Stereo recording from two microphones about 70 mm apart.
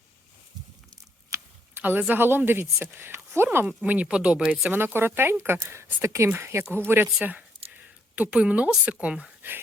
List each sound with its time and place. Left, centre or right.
1.3 s a sound: right
1.8 s speech: right
3.8 s speech: centre
4.7 s speech: right
7.3 s a sound: right
8.7 s speech: centre